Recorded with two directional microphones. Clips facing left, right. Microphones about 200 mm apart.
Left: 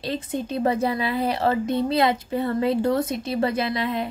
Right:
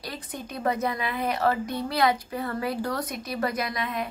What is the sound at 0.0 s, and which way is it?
A woman's voice, 25° left (ahead or behind).